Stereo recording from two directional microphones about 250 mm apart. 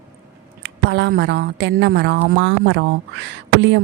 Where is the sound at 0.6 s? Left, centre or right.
Right.